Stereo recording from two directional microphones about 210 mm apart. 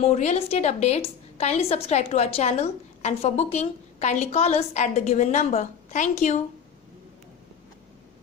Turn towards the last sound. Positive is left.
turn(degrees=35)  # may be behind; listen again after turning